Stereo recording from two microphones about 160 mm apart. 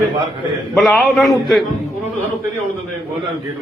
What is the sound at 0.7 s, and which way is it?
Speech, centre (ahead or behind).